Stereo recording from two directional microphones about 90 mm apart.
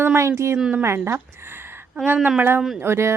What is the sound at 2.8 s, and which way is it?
Speech, 30° right (ahead or behind).